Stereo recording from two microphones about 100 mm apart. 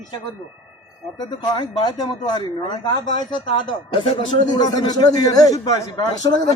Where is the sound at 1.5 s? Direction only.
45° left (ahead or behind).